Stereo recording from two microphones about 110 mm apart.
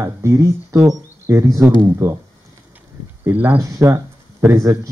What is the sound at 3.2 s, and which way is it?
Speech, 15° right (ahead or behind).